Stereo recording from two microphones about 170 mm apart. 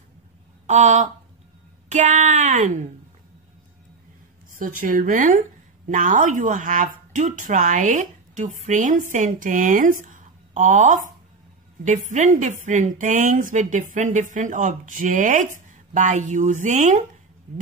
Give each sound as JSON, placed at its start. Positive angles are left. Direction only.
{"t": 0.7, "sound": "speech", "side_deg": -45}
{"t": 4.6, "sound": "speech", "side_deg": -50}